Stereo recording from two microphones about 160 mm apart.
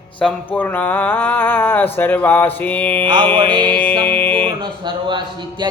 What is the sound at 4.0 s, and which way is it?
Music, 10° left (ahead or behind).